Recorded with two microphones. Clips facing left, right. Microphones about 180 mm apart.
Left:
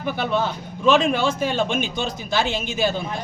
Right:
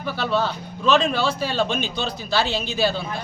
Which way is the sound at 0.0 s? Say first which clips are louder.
Even; 15° left (ahead or behind).